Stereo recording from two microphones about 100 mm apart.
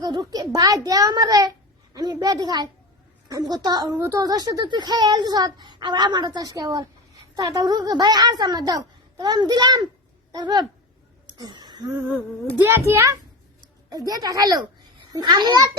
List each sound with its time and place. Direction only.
0.0 s a child's voice: 45° right (ahead or behind)
11.3 s a sound: 45° right (ahead or behind)
12.6 s a child's voice: 25° right (ahead or behind); by 15.6 s 45° right (ahead or behind)